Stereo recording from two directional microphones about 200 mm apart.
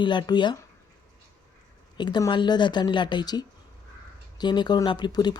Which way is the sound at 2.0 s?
20° left (ahead or behind).